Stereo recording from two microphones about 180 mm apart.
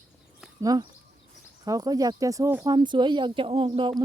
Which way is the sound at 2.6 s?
25° right (ahead or behind).